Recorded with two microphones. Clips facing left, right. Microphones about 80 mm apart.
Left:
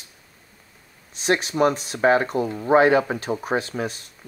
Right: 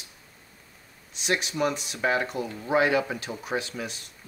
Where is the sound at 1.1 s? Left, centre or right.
Left.